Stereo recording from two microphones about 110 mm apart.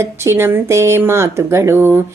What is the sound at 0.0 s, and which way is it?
Speech, 25° right (ahead or behind).